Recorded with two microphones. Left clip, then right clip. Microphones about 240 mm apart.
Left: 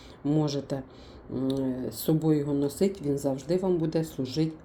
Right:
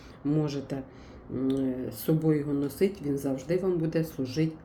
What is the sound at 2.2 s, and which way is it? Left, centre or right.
Speech, centre.